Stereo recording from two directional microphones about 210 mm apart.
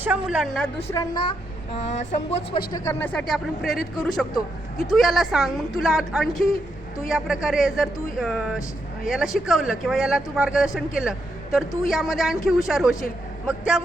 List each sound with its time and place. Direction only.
0.0 s speech: 5° right (ahead or behind)
0.9 s a woman's voice: 20° left (ahead or behind)
1.7 s speech: 30° left (ahead or behind)
2.7 s speech: 10° left (ahead or behind)
4.9 s speech: centre (ahead or behind)